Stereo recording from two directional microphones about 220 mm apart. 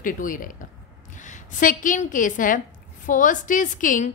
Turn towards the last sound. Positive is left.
turn(degrees=35)  # may be behind; listen again after turning